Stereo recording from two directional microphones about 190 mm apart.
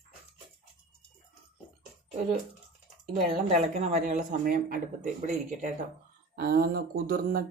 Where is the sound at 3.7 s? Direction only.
35° right (ahead or behind).